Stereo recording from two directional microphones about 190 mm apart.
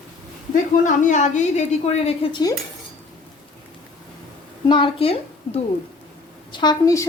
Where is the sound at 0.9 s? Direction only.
40° left (ahead or behind).